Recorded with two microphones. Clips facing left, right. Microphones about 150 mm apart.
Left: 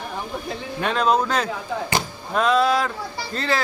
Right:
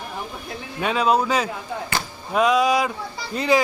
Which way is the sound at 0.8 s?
5° right (ahead or behind).